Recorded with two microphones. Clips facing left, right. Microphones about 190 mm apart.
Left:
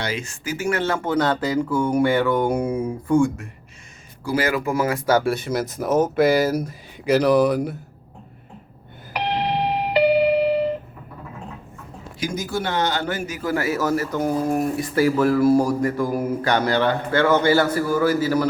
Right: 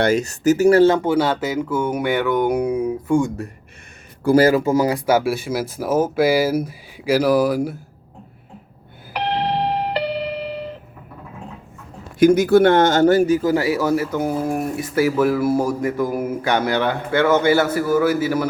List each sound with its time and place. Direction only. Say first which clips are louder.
0.0 s speech: right 11 dB; 45° right (ahead or behind)
0.9 s speech: right 4 dB; 15° right (ahead or behind)
3.1 s speech: left 1 dB; 20° right (ahead or behind)
4.2 s speech: right 9 dB; 50° right (ahead or behind)
4.4 s speech: right 6 dB; 25° right (ahead or behind)
5.0 s speech: right 1 dB; 10° right (ahead or behind)
9.1 s a sound: right 2 dB; centre (ahead or behind)
12.2 s speech: right 14 dB; 60° right (ahead or behind); by 13.4 s 35° right (ahead or behind)
13.4 s speech: right 4 dB; 20° right (ahead or behind)